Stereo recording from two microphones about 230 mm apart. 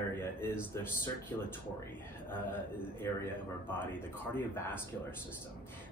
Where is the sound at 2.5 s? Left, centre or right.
Centre.